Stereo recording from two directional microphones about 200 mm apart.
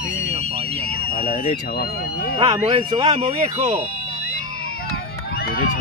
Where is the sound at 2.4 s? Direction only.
20° right (ahead or behind).